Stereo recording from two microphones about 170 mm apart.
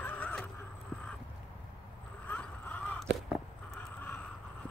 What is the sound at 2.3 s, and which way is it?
Vehicle, 10° left (ahead or behind).